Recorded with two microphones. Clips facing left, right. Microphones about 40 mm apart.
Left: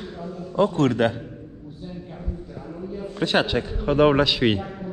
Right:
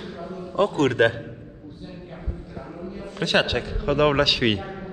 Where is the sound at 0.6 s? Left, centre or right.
Right.